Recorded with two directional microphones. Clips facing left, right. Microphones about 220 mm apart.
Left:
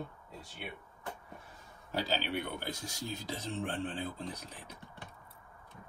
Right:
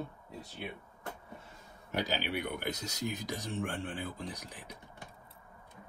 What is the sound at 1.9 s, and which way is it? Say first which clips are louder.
Speech: even; 15° right (ahead or behind).